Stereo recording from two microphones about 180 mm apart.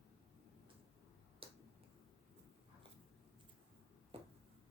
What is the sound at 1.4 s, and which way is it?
Finger snapping, 30° right (ahead or behind).